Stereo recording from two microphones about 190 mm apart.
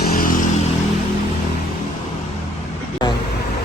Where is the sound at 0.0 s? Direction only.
45° left (ahead or behind).